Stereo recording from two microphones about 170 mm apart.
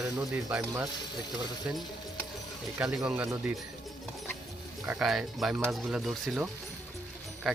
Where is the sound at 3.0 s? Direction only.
5° right (ahead or behind).